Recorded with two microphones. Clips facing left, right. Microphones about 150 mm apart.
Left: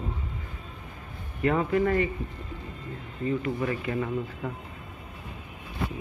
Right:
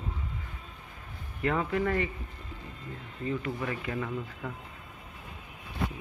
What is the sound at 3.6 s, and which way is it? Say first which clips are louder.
Speech: left 5 dB; 15° left (ahead or behind).